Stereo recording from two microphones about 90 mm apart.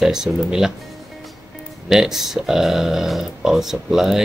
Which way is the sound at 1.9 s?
5° right (ahead or behind).